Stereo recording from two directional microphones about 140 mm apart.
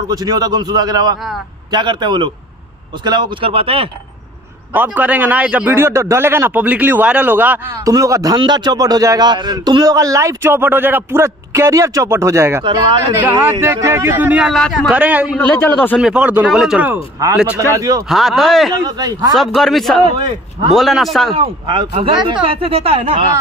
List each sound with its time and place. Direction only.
0.1 s a man's voice: 30° right (ahead or behind)
4.7 s a man's voice: 10° right (ahead or behind)
7.8 s a man's voice: 25° right (ahead or behind)
12.6 s speech: 35° right (ahead or behind)
13.2 s a man's voice: 15° right (ahead or behind)
15.3 s a man's voice: 15° left (ahead or behind)
16.0 s a man's voice: 5° right (ahead or behind)
17.6 s a man's voice: 25° right (ahead or behind)
18.0 s speech: centre (ahead or behind)
18.8 s a man's voice: 25° right (ahead or behind)
19.3 s speech: centre (ahead or behind)
20.0 s speech: 40° right (ahead or behind)
20.7 s speech: centre (ahead or behind)
21.4 s speech: 35° right (ahead or behind)